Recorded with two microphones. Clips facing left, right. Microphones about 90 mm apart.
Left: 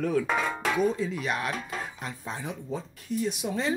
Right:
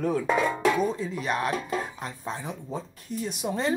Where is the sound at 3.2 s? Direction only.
45° right (ahead or behind).